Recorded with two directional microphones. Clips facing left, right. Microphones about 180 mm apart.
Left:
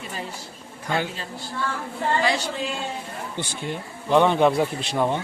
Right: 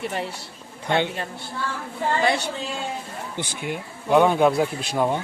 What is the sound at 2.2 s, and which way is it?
Speech, 60° right (ahead or behind).